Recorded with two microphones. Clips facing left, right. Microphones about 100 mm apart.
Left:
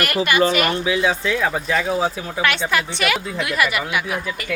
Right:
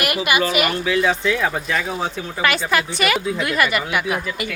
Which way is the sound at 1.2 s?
Centre (ahead or behind).